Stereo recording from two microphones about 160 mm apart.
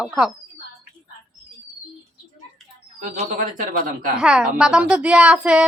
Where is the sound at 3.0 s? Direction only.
55° right (ahead or behind).